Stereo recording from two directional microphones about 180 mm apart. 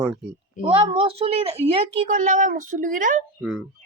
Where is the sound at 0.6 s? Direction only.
30° right (ahead or behind); by 3.2 s 45° right (ahead or behind).